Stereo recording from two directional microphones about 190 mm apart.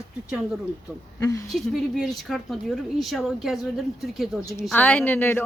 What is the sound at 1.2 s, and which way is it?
Speech, 15° left (ahead or behind).